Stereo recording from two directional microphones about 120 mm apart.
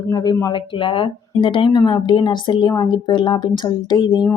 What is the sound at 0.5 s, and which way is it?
Speech, 45° left (ahead or behind).